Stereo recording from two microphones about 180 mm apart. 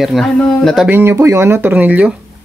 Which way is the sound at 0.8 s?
10° right (ahead or behind).